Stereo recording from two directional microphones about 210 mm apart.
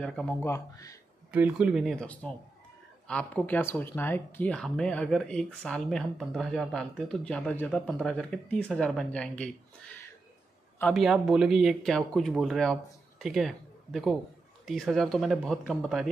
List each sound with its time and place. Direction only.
0.0 s speech: 5° left (ahead or behind)
1.3 s speech: 5° right (ahead or behind)